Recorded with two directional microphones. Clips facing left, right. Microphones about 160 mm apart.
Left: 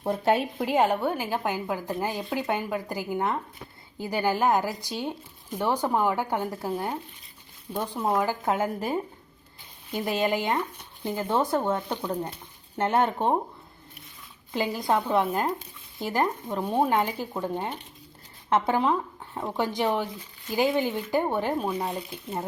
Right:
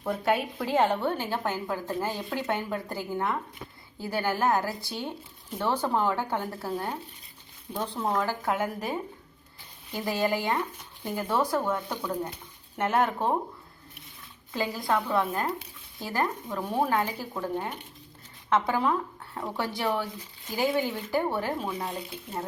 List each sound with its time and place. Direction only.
0.1 s speech: 25° left (ahead or behind)
0.7 s speech: 10° left (ahead or behind)
8.5 s speech: 25° left (ahead or behind)
14.5 s speech: 20° left (ahead or behind)